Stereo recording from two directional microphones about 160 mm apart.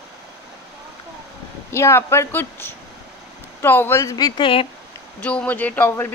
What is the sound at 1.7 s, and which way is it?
Speech, 15° left (ahead or behind).